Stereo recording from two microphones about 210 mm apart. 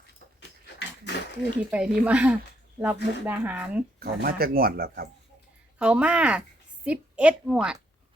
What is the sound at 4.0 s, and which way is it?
Speech, 45° right (ahead or behind).